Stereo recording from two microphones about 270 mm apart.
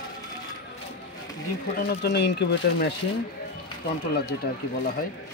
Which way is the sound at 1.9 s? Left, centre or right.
Left.